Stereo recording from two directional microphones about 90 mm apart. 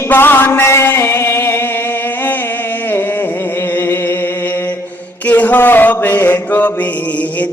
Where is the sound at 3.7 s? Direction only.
25° left (ahead or behind).